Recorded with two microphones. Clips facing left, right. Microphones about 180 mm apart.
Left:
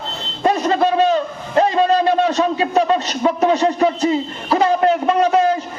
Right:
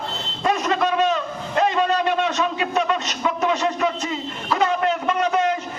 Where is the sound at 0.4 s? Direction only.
35° left (ahead or behind).